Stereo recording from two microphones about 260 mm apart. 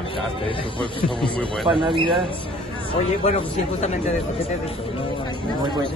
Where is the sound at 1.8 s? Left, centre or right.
Centre.